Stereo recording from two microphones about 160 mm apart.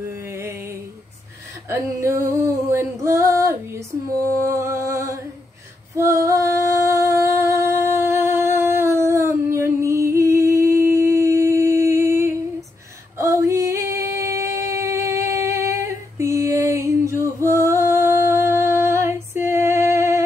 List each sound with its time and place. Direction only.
0.1 s music: 15° right (ahead or behind)
5.9 s female singing: 20° right (ahead or behind)
8.5 s a sound: 15° right (ahead or behind)
13.2 s female singing: 20° right (ahead or behind)
19.3 s music: 50° left (ahead or behind)
19.6 s music: 15° right (ahead or behind)